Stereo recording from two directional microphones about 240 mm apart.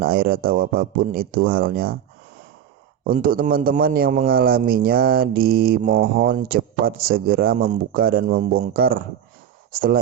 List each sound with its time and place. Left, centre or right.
0.0 s a man's voice: right
3.0 s a man's voice: right